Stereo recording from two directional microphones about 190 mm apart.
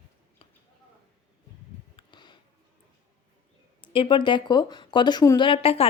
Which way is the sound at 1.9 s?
25° left (ahead or behind).